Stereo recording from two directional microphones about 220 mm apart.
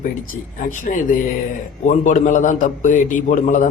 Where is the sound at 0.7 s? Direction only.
35° left (ahead or behind).